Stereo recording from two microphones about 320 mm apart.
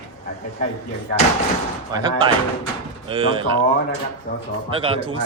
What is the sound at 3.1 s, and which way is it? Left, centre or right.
Speech, centre.